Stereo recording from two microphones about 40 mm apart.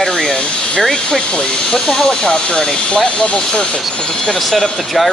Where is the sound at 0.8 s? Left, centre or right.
Centre.